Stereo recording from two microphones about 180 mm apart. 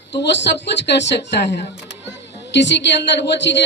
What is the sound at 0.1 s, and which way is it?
A woman's voice, 70° left (ahead or behind).